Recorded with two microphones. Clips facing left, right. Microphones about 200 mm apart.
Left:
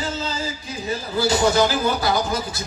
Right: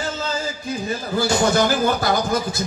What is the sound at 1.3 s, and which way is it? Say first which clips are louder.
Speech: even; 50° right (ahead or behind).